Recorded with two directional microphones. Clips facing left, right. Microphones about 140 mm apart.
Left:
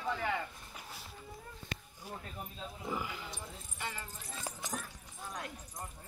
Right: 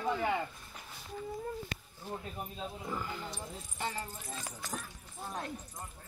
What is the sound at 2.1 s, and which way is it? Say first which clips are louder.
Speech: right 4 dB; 10° left (ahead or behind).